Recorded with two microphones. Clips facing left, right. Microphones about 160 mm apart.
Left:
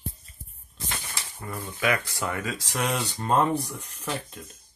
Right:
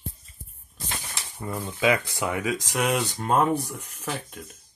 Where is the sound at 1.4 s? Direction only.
15° right (ahead or behind).